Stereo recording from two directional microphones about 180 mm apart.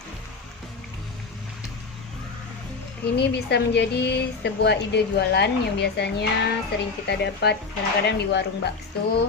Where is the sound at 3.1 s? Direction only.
65° left (ahead or behind).